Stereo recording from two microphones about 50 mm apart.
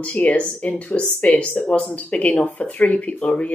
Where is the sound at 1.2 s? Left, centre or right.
Left.